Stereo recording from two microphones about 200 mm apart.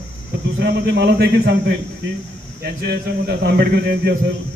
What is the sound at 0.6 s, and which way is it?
A man's voice, 55° right (ahead or behind).